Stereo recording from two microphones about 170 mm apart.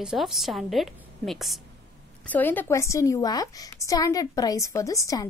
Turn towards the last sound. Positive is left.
turn(degrees=20)  # may be behind; listen again after turning